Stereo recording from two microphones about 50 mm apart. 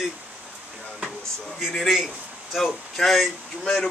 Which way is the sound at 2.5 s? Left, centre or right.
Centre.